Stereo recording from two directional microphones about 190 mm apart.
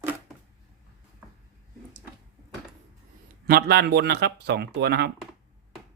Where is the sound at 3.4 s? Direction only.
55° right (ahead or behind).